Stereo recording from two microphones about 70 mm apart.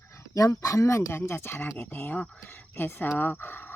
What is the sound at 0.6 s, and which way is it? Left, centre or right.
Speech, left.